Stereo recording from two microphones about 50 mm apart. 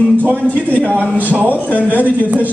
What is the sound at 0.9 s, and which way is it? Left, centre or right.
Speech, left.